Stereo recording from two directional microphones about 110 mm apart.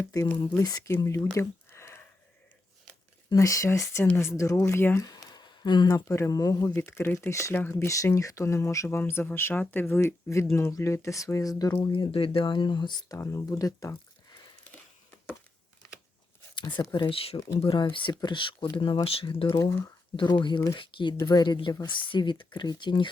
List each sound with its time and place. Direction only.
0.0 s speech: 30° left (ahead or behind)
0.9 s a sound: 25° left (ahead or behind)
3.2 s speech: 30° left (ahead or behind)
5.0 s speech: 35° left (ahead or behind)
11.8 s speech: 55° left (ahead or behind)
13.1 s speech: 25° left (ahead or behind)
16.6 s speech: 45° left (ahead or behind)
21.2 s speech: 35° left (ahead or behind)